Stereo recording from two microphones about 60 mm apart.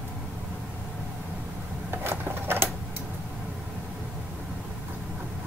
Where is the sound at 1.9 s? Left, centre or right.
Right.